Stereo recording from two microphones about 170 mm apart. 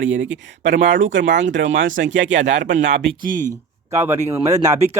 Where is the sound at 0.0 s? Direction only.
90° right.